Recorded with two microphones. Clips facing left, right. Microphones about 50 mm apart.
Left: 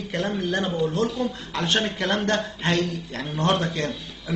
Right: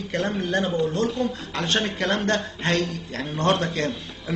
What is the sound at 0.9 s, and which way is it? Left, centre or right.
Speech, right.